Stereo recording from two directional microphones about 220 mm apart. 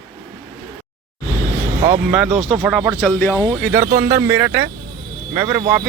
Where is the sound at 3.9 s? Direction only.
40° right (ahead or behind).